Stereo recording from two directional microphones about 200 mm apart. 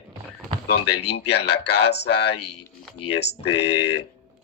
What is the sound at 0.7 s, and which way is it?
Speech, 55° left (ahead or behind).